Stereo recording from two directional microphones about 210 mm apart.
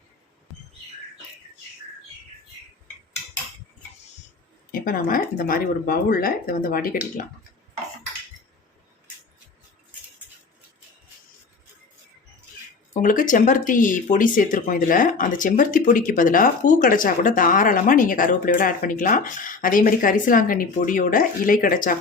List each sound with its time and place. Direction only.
4.7 s speech: 45° left (ahead or behind)
12.9 s speech: 40° left (ahead or behind)